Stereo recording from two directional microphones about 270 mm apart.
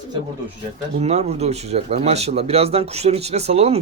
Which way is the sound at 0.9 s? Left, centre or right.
Right.